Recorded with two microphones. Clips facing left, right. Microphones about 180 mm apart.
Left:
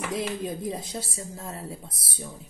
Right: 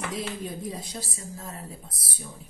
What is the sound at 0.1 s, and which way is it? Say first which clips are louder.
Speech: left 3 dB; 20° left (ahead or behind).